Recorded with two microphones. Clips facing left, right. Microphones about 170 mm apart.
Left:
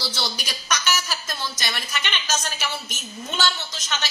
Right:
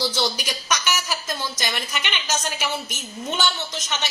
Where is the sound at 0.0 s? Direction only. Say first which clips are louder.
Right 6 dB; 15° right (ahead or behind).